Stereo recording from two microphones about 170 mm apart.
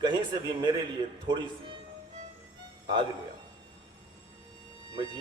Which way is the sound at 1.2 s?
25° right (ahead or behind).